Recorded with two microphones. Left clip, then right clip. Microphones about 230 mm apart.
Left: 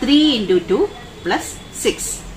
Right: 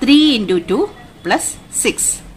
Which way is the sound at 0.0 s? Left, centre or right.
Right.